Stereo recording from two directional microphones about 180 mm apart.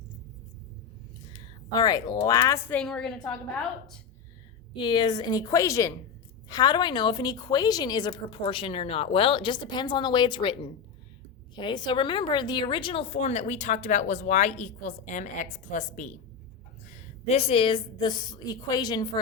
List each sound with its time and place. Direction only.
1.3 s a woman's voice: 20° left (ahead or behind); by 3.3 s 5° left (ahead or behind)
4.7 s a woman's voice: 25° left (ahead or behind)